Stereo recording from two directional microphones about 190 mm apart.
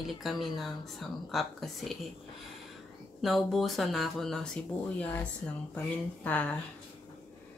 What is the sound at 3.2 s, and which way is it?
A woman's voice, centre (ahead or behind).